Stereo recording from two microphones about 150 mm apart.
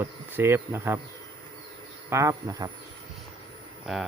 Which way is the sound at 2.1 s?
20° right (ahead or behind).